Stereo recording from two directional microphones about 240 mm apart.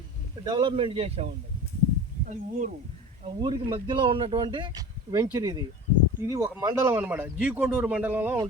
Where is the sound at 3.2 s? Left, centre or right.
Centre.